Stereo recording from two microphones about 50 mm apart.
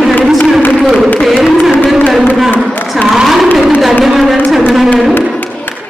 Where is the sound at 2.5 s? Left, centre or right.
Left.